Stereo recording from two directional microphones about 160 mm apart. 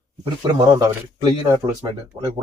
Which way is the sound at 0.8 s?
25° right (ahead or behind).